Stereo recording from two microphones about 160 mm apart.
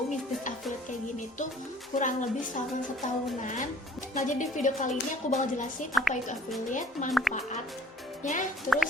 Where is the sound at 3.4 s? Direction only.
50° left (ahead or behind).